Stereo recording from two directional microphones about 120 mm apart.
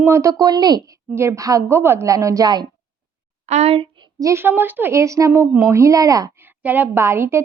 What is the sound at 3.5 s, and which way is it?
Speech, 60° right (ahead or behind).